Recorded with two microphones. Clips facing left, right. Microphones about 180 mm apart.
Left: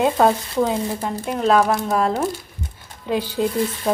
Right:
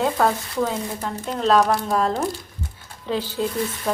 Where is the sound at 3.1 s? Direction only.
15° left (ahead or behind).